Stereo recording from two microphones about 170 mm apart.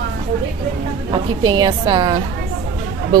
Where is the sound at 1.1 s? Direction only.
30° right (ahead or behind).